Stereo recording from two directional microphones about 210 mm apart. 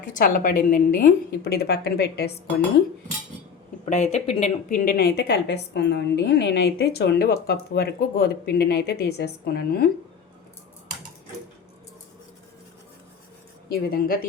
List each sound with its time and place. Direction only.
0.0 s a woman's voice: 40° left (ahead or behind)
3.8 s a woman's voice: 35° left (ahead or behind); by 9.8 s 50° left (ahead or behind)
13.7 s a woman's voice: 45° left (ahead or behind)